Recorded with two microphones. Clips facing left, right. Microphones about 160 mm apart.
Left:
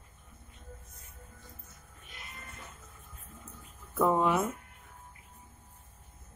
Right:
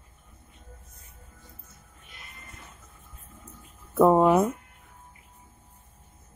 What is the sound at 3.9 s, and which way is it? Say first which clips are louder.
Speech: right 8 dB; 40° right (ahead or behind).